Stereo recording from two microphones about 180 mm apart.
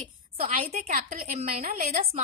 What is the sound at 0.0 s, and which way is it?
Speech, 35° right (ahead or behind).